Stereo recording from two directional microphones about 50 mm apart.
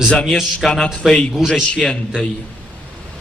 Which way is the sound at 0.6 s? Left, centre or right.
Centre.